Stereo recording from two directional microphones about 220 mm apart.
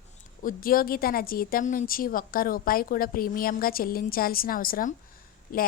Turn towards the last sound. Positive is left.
turn(degrees=40)  # may be behind; listen again after turning